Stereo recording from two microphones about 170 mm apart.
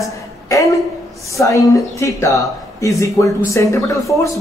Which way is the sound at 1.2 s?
20° left (ahead or behind).